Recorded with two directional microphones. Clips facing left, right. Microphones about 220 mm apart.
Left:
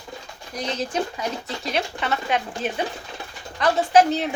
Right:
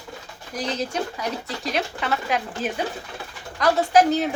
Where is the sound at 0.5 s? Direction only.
Centre (ahead or behind).